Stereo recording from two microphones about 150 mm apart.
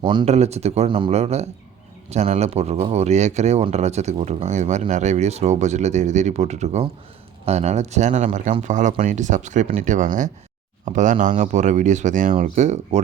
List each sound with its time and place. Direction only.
0.0 s speech: 30° right (ahead or behind)
0.3 s speech: 45° right (ahead or behind)